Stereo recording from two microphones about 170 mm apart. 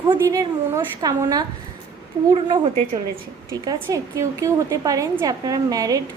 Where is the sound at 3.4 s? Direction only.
20° right (ahead or behind).